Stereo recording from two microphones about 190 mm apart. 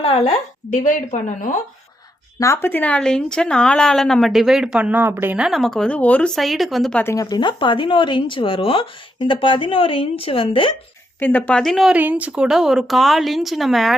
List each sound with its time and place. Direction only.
0.0 s a woman's voice: 30° left (ahead or behind)
2.4 s a woman's voice: 15° left (ahead or behind)
7.0 s speech: 15° left (ahead or behind)
11.2 s a woman's voice: 10° left (ahead or behind)